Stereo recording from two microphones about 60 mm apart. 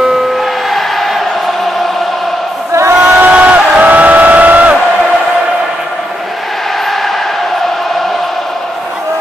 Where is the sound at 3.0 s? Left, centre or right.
Right.